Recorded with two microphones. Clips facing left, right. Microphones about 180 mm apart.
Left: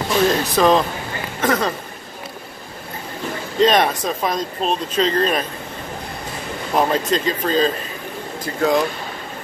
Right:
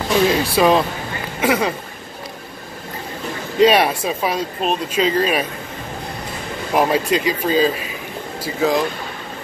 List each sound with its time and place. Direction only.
0.3 s speech: 10° right (ahead or behind)
3.5 s speech: 10° right (ahead or behind)
6.7 s speech: 10° right (ahead or behind)